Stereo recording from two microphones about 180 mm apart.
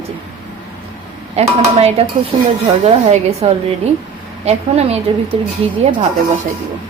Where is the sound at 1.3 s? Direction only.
35° right (ahead or behind).